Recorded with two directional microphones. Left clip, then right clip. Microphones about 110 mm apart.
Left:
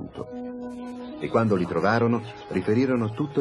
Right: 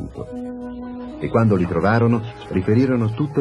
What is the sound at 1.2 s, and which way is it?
A man's voice, 35° left (ahead or behind).